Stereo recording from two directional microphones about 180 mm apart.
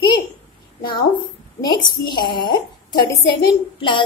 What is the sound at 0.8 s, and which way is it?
A woman's voice, 25° left (ahead or behind).